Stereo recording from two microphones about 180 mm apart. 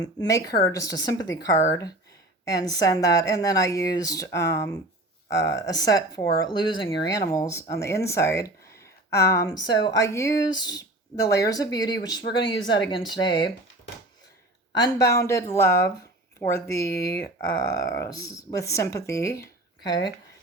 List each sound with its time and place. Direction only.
0.0 s speech: 20° left (ahead or behind)
14.7 s speech: 20° left (ahead or behind)